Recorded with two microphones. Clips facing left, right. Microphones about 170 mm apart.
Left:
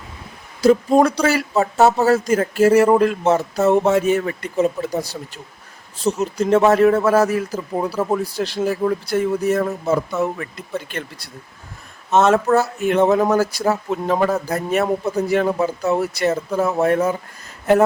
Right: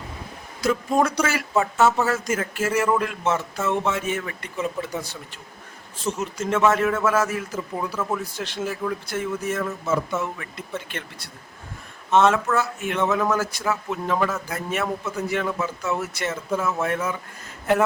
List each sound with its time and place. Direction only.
0.6 s speech: 35° left (ahead or behind)